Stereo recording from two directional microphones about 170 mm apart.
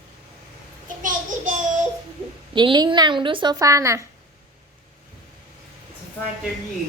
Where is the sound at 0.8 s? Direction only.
50° right (ahead or behind).